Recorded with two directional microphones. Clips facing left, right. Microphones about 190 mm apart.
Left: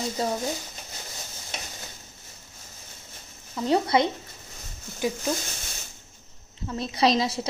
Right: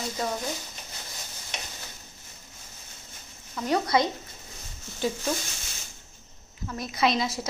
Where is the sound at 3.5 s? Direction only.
25° left (ahead or behind).